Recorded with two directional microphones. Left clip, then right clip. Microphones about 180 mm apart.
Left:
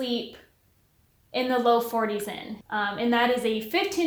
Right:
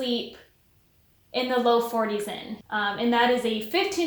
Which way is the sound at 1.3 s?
35° left (ahead or behind).